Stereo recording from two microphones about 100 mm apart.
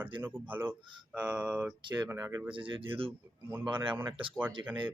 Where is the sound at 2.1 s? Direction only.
30° right (ahead or behind).